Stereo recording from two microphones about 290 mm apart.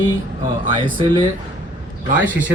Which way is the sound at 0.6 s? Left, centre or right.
Right.